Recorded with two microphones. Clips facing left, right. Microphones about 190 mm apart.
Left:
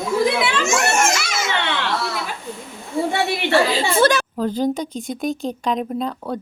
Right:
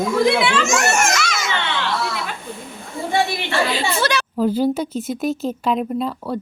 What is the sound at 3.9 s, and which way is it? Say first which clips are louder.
Speech: left 8 dB; 50° left (ahead or behind).